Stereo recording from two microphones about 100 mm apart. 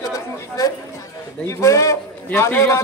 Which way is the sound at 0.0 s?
35° left (ahead or behind).